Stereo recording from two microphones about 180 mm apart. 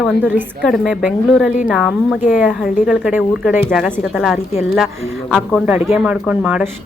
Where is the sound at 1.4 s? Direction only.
40° left (ahead or behind).